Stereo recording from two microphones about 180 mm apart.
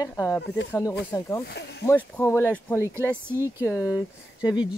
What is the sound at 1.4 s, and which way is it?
Speech, 65° left (ahead or behind).